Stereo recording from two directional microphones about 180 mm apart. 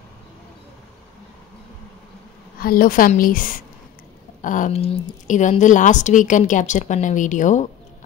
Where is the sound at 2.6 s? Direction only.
55° left (ahead or behind).